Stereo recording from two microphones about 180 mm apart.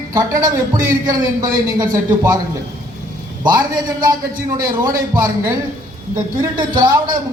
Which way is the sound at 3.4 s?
25° right (ahead or behind).